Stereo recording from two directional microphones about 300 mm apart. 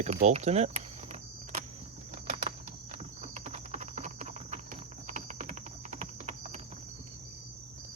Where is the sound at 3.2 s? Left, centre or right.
Right.